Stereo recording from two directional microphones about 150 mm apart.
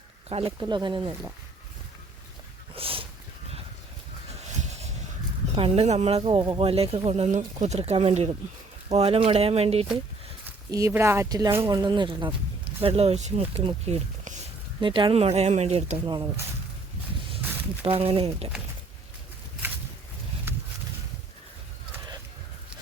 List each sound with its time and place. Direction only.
0.3 s speech: 40° right (ahead or behind)
0.6 s speech: 30° right (ahead or behind)
2.7 s a sound: 35° right (ahead or behind)
5.5 s speech: 40° right (ahead or behind)
10.7 s speech: 20° right (ahead or behind)
11.7 s speech: 30° right (ahead or behind); by 14.3 s 45° right (ahead or behind)
14.8 s speech: 35° right (ahead or behind)
17.4 s a sound: 15° right (ahead or behind)
17.8 s speech: 40° right (ahead or behind)
20.5 s a sound: 15° right (ahead or behind)